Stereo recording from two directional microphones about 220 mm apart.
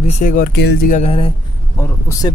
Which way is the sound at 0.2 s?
40° left (ahead or behind).